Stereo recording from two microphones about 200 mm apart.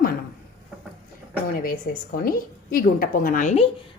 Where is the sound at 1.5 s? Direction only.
45° left (ahead or behind).